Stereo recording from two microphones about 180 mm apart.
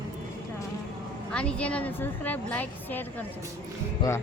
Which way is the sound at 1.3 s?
5° left (ahead or behind).